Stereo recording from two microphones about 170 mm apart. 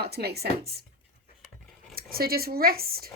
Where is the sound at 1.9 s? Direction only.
60° right (ahead or behind).